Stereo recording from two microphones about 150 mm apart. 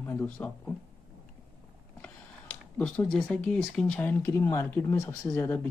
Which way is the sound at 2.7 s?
10° left (ahead or behind).